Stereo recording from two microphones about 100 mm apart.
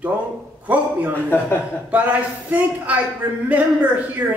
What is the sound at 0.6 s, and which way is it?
Speech, 15° right (ahead or behind).